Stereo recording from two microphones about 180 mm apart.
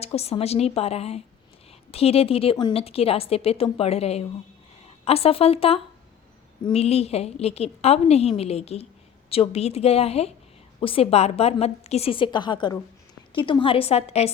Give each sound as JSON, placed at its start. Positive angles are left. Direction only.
{"t": 0.0, "sound": "a woman's voice", "side_deg": 35}
{"t": 6.8, "sound": "a woman's voice", "side_deg": 35}